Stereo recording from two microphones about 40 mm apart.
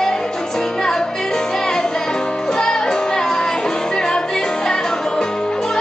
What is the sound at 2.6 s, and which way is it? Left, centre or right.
Music, centre.